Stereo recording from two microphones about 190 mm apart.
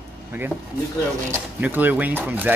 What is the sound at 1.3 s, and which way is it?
Speech, 10° right (ahead or behind).